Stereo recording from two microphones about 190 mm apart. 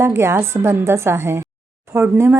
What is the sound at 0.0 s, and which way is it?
A woman's voice, 15° right (ahead or behind).